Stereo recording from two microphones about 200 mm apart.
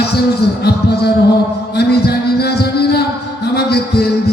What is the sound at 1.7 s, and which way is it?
Music, 55° left (ahead or behind).